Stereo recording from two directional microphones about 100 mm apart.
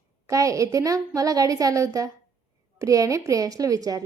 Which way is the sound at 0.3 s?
35° right (ahead or behind).